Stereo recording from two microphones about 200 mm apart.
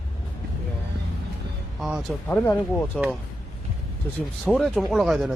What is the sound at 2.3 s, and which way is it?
Speech, 10° left (ahead or behind).